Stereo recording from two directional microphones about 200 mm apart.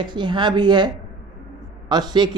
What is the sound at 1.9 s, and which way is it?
Speech, 20° right (ahead or behind).